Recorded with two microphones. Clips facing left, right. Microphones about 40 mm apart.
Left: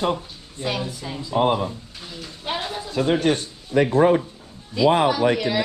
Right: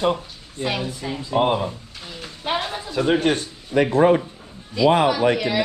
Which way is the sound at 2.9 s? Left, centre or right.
Right.